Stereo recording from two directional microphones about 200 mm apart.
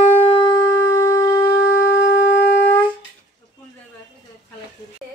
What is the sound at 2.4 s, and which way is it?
Wind instrument, 10° left (ahead or behind).